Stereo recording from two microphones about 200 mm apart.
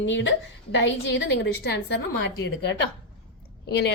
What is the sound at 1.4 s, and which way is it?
Speech, 55° left (ahead or behind).